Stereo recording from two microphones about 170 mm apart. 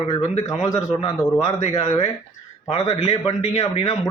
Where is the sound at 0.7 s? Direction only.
20° left (ahead or behind).